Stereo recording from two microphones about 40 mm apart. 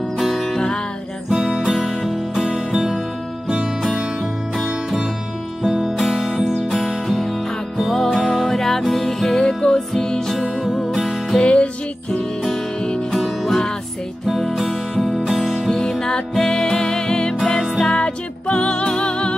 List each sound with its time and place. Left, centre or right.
0.2 s music: centre
5.6 s music: centre
7.1 s music: centre
10.4 s music: centre
11.4 s music: left
13.2 s music: centre
15.7 s music: centre
17.4 s music: centre
17.9 s music: left